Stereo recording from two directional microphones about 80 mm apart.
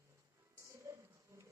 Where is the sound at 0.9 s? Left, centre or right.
Right.